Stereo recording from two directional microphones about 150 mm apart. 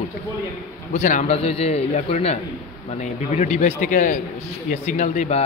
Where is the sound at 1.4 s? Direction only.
40° left (ahead or behind).